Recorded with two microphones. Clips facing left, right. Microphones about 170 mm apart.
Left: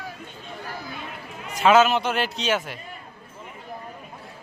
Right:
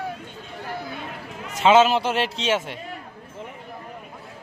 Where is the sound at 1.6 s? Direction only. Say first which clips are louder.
Right 1 dB; 25° right (ahead or behind).